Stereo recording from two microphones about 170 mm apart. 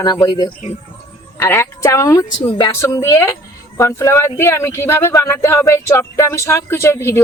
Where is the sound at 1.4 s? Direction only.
15° left (ahead or behind).